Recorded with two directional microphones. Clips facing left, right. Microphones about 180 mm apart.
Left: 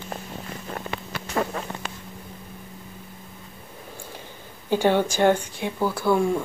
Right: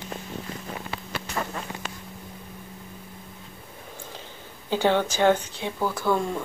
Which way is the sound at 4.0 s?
10° left (ahead or behind).